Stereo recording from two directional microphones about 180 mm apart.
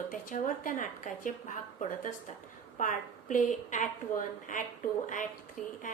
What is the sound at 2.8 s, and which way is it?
A woman's voice, 45° left (ahead or behind).